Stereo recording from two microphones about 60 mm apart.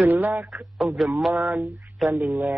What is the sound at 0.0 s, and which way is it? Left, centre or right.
Speech, right.